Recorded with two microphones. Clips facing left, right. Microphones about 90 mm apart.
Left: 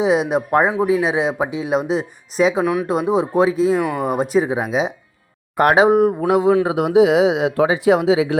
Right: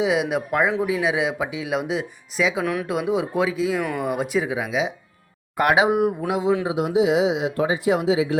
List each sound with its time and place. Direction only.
0.0 s speech: 35° left (ahead or behind)
6.1 s speech: 50° left (ahead or behind)
6.7 s speech: 60° left (ahead or behind); by 8.4 s 90° left